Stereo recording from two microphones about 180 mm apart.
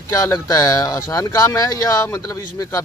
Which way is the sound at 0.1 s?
20° left (ahead or behind).